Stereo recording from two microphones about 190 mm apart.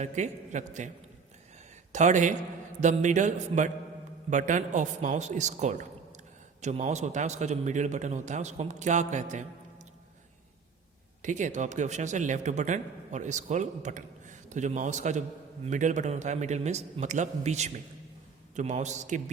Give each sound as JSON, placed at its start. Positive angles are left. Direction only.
{"t": 0.0, "sound": "a man's voice", "side_deg": -40}
{"t": 1.9, "sound": "a man's voice", "side_deg": -40}
{"t": 11.2, "sound": "a man's voice", "side_deg": -40}